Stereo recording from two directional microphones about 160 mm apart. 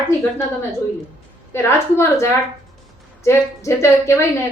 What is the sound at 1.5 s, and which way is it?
A woman's voice, 15° left (ahead or behind).